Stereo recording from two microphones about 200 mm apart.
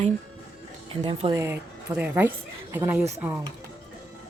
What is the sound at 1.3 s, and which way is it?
A woman's voice, 15° right (ahead or behind).